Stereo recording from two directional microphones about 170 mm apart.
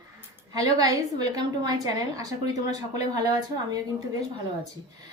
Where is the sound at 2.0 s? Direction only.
20° right (ahead or behind).